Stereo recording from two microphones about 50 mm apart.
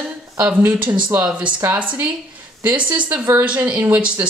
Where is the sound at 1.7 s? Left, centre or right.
Right.